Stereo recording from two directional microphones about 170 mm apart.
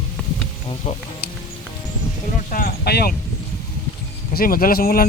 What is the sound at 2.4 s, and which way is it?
Speech, 60° left (ahead or behind).